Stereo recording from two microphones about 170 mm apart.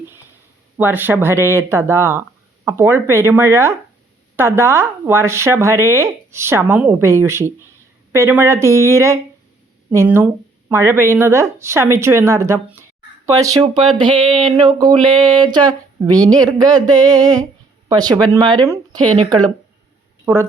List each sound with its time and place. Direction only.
0.8 s speech: 10° right (ahead or behind)
20.2 s speech: 15° right (ahead or behind)